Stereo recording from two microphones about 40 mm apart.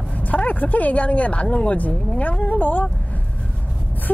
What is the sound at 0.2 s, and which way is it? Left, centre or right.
Speech, left.